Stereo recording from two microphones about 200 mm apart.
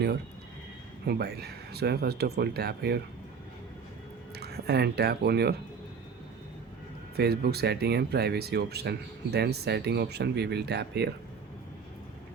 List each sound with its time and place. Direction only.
1.0 s speech: 55° right (ahead or behind)
4.4 s speech: 55° right (ahead or behind)
7.2 s speech: 55° right (ahead or behind)